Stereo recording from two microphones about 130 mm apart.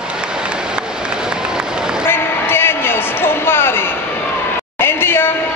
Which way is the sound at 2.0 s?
15° left (ahead or behind).